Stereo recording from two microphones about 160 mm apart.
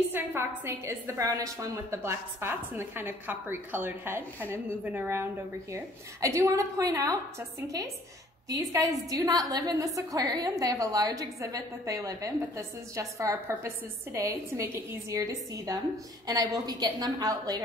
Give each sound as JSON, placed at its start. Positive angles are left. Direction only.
{"t": 0.1, "sound": "a woman's voice", "side_deg": -15}